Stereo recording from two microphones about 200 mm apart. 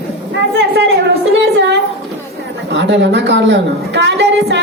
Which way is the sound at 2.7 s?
60° right (ahead or behind).